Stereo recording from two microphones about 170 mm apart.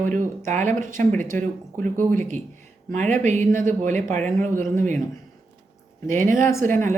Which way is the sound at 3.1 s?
45° right (ahead or behind).